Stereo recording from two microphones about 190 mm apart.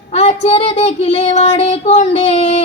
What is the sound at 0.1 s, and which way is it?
Child singing, 35° left (ahead or behind).